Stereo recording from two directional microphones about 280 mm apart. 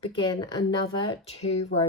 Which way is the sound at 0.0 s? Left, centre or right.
Centre.